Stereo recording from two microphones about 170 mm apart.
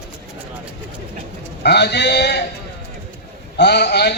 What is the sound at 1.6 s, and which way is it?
Speech, 75° left (ahead or behind).